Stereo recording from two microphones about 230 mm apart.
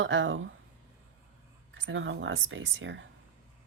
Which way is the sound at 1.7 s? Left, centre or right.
Right.